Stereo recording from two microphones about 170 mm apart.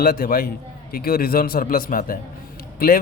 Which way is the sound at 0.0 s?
60° left (ahead or behind).